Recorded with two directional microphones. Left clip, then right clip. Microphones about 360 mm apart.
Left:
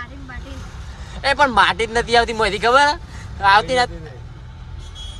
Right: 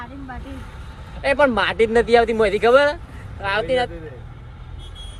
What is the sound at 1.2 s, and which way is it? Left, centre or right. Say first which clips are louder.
Speech: left 3 dB; centre.